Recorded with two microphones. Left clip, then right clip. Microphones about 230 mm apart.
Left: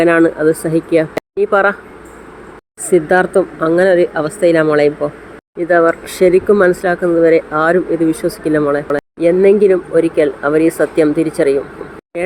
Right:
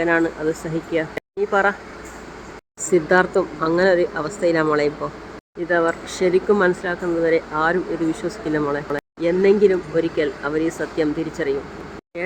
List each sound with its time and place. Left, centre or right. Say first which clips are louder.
0.0 s speech: left 9 dB; centre
2.9 s speech: left 5 dB; centre